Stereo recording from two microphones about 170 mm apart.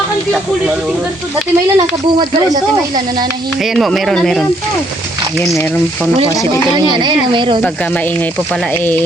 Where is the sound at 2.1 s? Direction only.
25° right (ahead or behind).